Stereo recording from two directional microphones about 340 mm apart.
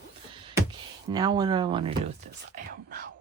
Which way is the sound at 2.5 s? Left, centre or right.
Right.